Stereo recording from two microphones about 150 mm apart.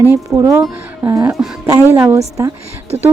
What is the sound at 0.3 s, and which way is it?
A woman's voice, 20° right (ahead or behind).